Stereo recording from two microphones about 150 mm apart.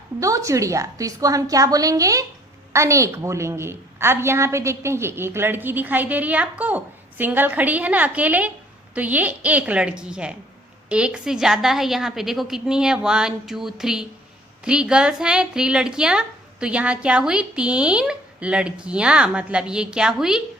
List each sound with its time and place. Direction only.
0.2 s a woman's voice: 20° right (ahead or behind); by 20.4 s 5° right (ahead or behind)